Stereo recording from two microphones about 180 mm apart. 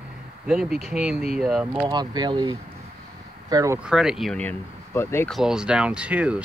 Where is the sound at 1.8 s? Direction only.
25° right (ahead or behind).